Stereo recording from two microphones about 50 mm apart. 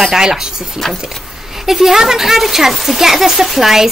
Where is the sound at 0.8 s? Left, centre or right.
Centre.